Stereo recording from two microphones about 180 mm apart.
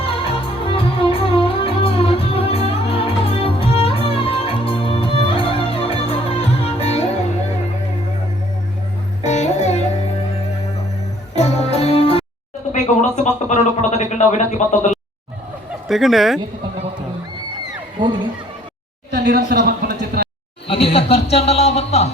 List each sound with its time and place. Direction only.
0.0 s music: 30° left (ahead or behind)
9.2 s music: 40° left (ahead or behind)
11.3 s music: 35° left (ahead or behind)
12.7 s speech: 40° left (ahead or behind)
15.9 s speech: centre (ahead or behind)
16.4 s a sound: 35° right (ahead or behind)
18.0 s speech: 25° right (ahead or behind)
19.1 s a woman's voice: 65° right (ahead or behind)
20.7 s speech: 30° left (ahead or behind)